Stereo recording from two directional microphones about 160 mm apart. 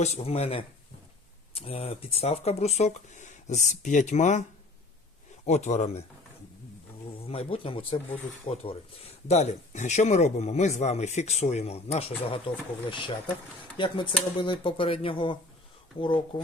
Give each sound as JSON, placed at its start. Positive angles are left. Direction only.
{"t": 0.0, "sound": "speech", "side_deg": 40}
{"t": 5.5, "sound": "speech", "side_deg": 45}
{"t": 7.3, "sound": "speech", "side_deg": 35}